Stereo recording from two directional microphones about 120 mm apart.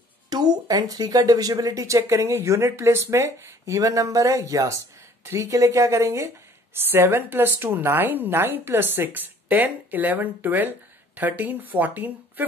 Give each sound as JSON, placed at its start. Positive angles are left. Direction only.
{"t": 0.3, "sound": "speech", "side_deg": -35}